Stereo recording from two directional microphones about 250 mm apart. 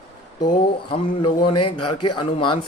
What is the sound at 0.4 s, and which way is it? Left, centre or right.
A man's voice, left.